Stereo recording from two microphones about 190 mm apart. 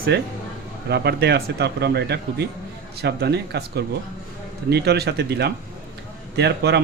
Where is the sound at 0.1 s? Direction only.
60° right (ahead or behind).